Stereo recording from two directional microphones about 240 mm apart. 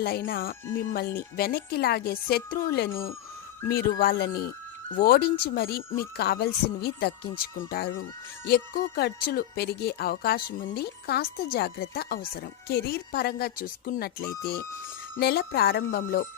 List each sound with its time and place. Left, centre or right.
0.3 s speech: left